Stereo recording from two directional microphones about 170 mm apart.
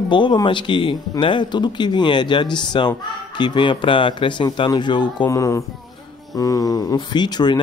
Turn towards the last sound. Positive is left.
turn(degrees=25)  # may be behind; listen again after turning